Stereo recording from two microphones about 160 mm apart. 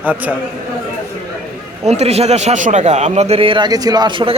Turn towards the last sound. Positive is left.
turn(degrees=-30)  # may be behind; listen again after turning